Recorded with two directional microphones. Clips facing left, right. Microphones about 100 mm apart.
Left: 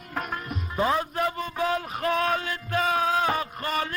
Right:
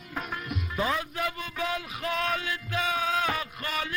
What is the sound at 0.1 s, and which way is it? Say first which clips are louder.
Music: left 3 dB; 50° left (ahead or behind).